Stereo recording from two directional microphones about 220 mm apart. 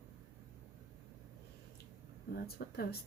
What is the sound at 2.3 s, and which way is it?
Speech, 45° left (ahead or behind).